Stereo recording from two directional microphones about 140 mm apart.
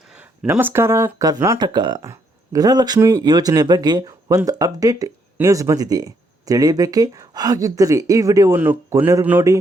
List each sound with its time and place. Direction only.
0.1 s speech: 10° right (ahead or behind); by 8.6 s 25° right (ahead or behind)
8.6 s speech: 15° right (ahead or behind)